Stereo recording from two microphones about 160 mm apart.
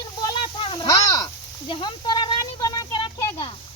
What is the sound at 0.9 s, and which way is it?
Speech, 20° left (ahead or behind).